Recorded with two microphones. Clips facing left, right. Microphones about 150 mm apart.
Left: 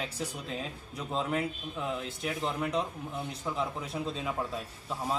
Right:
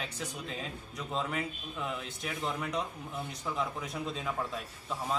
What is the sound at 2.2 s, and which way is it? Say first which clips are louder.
Speech: left 3 dB; 5° left (ahead or behind).